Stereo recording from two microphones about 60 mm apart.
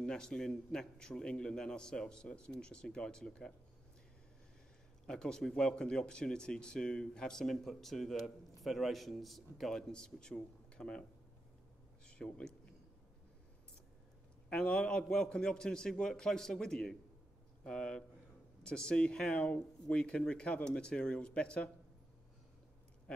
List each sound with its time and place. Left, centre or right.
0.0 s speech: centre
5.0 s speech: centre
12.1 s speech: centre
14.5 s speech: centre
23.1 s a sound: centre